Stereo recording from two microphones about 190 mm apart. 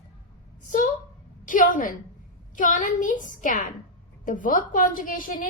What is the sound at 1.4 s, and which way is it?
A woman's voice, 45° left (ahead or behind).